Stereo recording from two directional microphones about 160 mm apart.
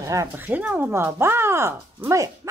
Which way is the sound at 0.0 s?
20° right (ahead or behind).